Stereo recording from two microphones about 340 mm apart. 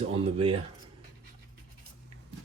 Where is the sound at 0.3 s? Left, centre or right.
Centre.